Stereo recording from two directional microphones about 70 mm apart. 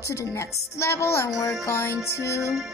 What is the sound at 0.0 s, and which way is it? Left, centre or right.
A woman's voice, left.